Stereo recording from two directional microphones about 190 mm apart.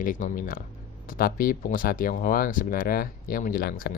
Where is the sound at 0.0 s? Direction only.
45° left (ahead or behind).